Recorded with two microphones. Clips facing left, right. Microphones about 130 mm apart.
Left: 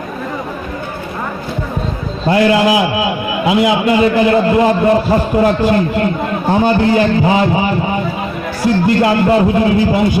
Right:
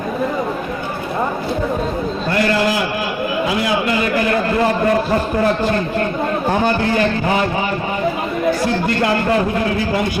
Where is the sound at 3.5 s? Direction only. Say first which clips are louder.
Left 9 dB; 20° left (ahead or behind).